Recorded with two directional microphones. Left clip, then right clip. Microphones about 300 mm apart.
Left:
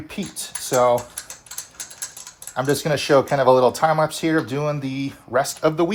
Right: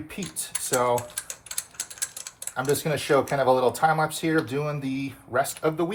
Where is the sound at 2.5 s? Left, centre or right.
Left.